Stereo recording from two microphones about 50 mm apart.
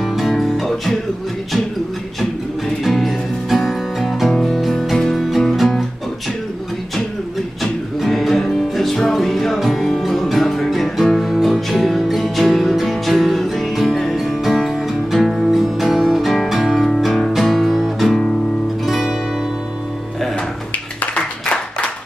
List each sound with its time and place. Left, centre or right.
0.0 s music: centre
2.8 s music: centre
7.6 s music: centre
21.0 s a sound: left